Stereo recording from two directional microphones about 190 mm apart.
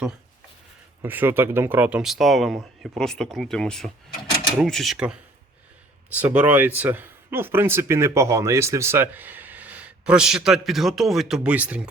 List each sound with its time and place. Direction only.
1.0 s speech: 10° right (ahead or behind)